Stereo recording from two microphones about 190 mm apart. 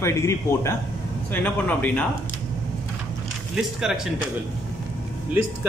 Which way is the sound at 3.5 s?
5° right (ahead or behind).